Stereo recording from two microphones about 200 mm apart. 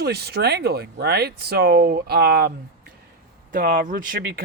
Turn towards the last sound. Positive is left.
turn(degrees=-45)  # may be behind; listen again after turning